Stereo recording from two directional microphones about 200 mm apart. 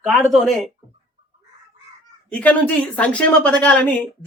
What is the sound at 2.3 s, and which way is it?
Speech, 5° left (ahead or behind).